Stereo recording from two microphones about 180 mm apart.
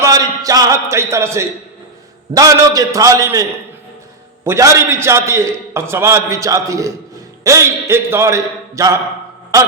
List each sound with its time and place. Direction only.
0.0 s a man's voice: 20° right (ahead or behind)
4.4 s a man's voice: 15° right (ahead or behind)